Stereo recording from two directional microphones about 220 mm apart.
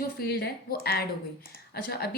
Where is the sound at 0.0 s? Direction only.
45° left (ahead or behind).